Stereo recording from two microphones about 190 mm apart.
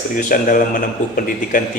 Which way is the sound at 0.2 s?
45° left (ahead or behind).